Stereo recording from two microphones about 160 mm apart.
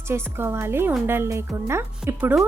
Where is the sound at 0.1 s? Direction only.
15° right (ahead or behind).